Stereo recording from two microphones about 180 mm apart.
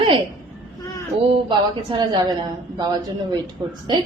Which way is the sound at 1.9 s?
25° right (ahead or behind).